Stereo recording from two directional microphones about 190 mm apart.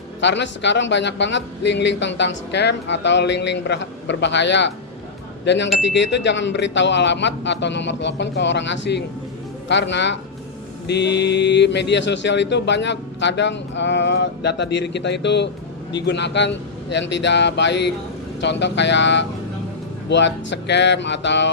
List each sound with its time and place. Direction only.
0.2 s speech: 70° left (ahead or behind)